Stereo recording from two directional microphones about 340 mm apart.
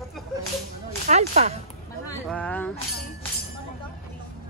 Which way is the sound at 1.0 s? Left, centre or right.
Centre.